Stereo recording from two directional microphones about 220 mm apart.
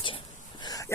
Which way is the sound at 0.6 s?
15° left (ahead or behind).